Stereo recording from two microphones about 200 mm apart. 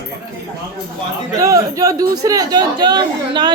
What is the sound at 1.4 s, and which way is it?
Speech, 15° right (ahead or behind).